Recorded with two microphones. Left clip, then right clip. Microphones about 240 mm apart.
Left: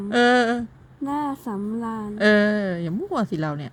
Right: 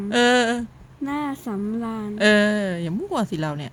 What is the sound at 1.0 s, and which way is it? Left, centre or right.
A woman's voice, right.